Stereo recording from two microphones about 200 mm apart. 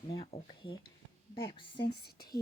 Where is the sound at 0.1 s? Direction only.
25° left (ahead or behind).